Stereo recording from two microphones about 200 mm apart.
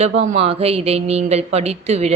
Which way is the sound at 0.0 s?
35° right (ahead or behind).